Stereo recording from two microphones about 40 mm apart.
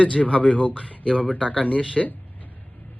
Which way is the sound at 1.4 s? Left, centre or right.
Centre.